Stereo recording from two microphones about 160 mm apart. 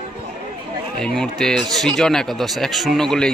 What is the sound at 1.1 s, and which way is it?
Speech, 5° left (ahead or behind).